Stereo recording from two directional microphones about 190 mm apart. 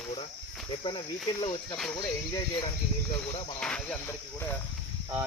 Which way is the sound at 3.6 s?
5° left (ahead or behind).